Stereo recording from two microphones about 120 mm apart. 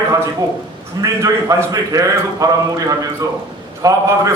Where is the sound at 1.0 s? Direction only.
25° right (ahead or behind).